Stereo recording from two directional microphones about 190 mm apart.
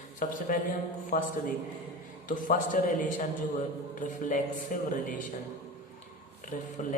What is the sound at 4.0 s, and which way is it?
Speech, 45° left (ahead or behind).